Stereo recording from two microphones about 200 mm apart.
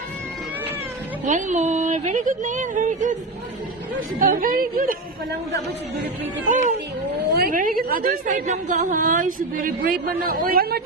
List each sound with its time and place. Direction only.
1.2 s a woman's voice: 40° right (ahead or behind)
4.2 s a woman's voice: 45° right (ahead or behind)
6.5 s a woman's voice: 40° right (ahead or behind)